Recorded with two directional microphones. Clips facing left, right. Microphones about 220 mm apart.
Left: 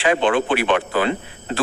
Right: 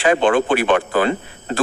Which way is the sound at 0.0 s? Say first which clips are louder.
Right 3 dB; 45° right (ahead or behind).